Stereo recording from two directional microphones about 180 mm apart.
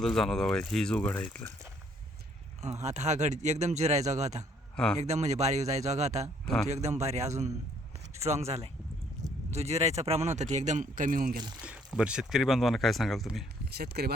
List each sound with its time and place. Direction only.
0.0 s speech: centre (ahead or behind)
2.8 s speech: 40° right (ahead or behind)
6.4 s speech: 5° left (ahead or behind)
6.7 s speech: 40° right (ahead or behind)
11.6 s speech: 5° right (ahead or behind)
13.7 s speech: 65° right (ahead or behind)